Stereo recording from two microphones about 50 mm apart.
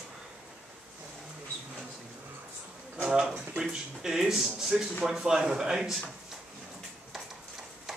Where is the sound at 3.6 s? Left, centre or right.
Centre.